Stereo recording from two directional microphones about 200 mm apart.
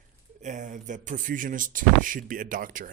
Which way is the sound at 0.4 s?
40° right (ahead or behind).